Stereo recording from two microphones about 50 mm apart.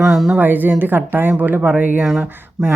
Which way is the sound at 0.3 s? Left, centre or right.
Right.